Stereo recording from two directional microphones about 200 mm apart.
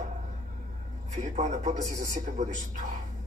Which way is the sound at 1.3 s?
35° right (ahead or behind).